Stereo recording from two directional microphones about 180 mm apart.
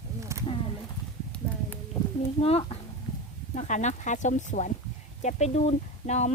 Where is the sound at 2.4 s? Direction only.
35° left (ahead or behind).